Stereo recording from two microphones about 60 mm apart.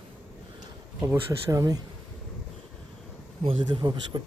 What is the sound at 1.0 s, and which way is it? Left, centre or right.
Speech, right.